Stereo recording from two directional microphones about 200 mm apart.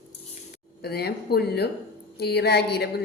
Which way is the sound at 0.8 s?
55° left (ahead or behind).